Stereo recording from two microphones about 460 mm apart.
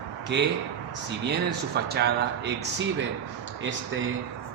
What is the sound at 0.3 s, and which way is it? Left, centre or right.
A man's voice, right.